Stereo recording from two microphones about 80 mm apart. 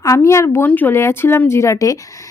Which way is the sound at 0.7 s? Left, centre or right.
Left.